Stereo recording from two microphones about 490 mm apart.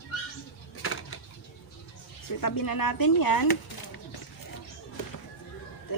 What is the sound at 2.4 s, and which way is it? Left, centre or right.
Speech, left.